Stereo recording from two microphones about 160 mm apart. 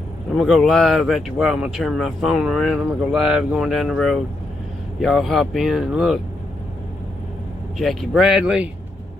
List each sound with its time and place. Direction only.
0.4 s speech: centre (ahead or behind)
7.8 s speech: centre (ahead or behind)